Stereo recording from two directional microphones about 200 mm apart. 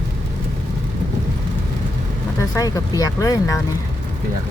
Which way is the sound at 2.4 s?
15° left (ahead or behind).